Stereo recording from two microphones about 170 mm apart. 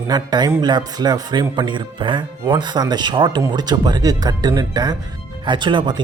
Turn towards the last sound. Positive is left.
turn(degrees=-30)  # may be behind; listen again after turning